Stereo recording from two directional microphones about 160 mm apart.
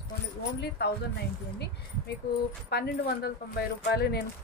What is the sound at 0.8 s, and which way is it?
Speech, 90° left.